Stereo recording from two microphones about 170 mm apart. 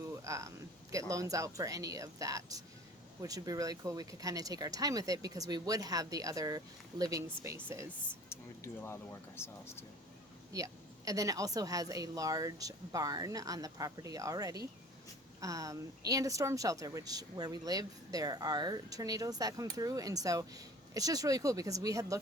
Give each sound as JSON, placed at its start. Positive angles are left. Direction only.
{"t": 0.1, "sound": "a woman's voice", "side_deg": -20}
{"t": 8.3, "sound": "speech", "side_deg": 15}
{"t": 10.5, "sound": "a woman's voice", "side_deg": -20}